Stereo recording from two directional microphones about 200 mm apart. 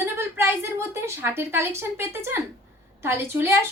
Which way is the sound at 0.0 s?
10° right (ahead or behind).